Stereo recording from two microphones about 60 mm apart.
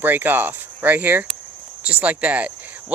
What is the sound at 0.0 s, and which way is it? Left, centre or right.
Speech, right.